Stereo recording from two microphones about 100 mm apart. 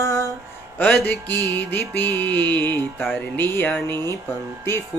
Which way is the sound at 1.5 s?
20° left (ahead or behind).